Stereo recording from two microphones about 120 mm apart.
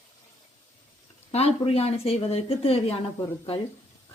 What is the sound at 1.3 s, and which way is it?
Speech, 60° left (ahead or behind).